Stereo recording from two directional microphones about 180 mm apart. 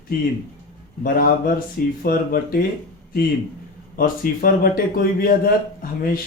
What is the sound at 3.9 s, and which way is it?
Speech, 50° left (ahead or behind).